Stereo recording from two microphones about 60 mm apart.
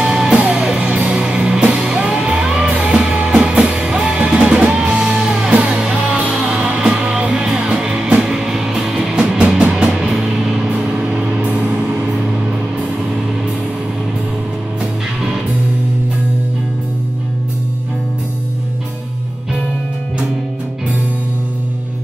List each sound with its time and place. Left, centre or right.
0.0 s music: centre
11.1 s music: right